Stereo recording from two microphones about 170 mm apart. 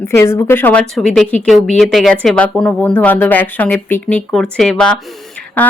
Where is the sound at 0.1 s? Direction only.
15° left (ahead or behind).